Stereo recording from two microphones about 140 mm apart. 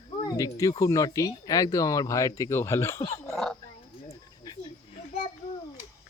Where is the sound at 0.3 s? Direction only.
25° left (ahead or behind).